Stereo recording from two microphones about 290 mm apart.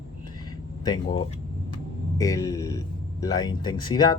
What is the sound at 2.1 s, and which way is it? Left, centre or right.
Speech, centre.